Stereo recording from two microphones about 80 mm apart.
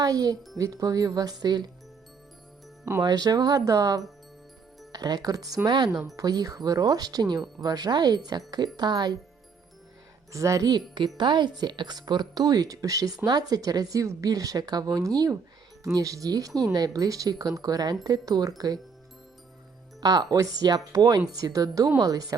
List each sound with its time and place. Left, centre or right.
0.0 s speech: right
3.0 s speech: right
4.9 s speech: right
5.6 s speech: right
6.1 s speech: right
10.3 s speech: right
10.7 s speech: right
11.2 s speech: right
13.2 s speech: right
20.0 s speech: right